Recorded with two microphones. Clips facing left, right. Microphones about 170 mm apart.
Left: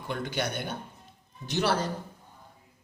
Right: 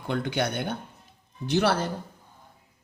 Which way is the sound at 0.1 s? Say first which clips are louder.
Right 4 dB; 60° right (ahead or behind).